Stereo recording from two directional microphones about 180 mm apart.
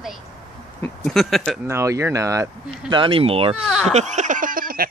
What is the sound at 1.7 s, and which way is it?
Speech, 15° right (ahead or behind).